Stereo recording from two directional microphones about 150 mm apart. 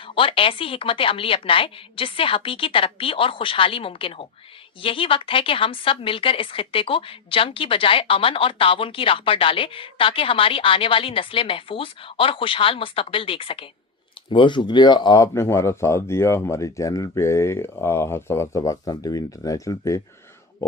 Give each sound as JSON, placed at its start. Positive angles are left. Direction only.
{"t": 0.0, "sound": "a woman's voice", "side_deg": 35}